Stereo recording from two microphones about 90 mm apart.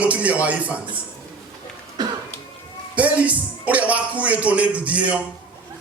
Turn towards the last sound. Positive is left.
turn(degrees=-15)  # may be behind; listen again after turning